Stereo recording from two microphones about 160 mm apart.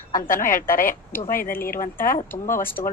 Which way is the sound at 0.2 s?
60° left (ahead or behind).